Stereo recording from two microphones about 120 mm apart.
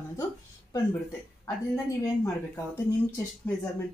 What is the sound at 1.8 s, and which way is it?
Speech, 25° left (ahead or behind).